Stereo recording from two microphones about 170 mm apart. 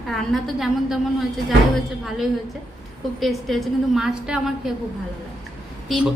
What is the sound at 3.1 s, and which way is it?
A woman's voice, centre (ahead or behind).